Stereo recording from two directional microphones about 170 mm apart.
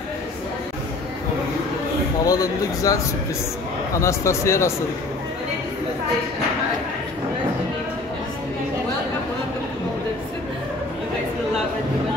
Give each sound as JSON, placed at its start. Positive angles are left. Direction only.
{"t": 2.2, "sound": "speech", "side_deg": 20}
{"t": 4.0, "sound": "speech", "side_deg": 15}